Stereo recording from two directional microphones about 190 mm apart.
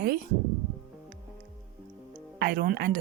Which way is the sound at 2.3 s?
55° right (ahead or behind).